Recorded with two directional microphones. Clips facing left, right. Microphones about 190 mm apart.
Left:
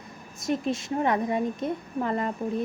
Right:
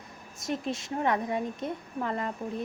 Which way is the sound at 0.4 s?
10° left (ahead or behind).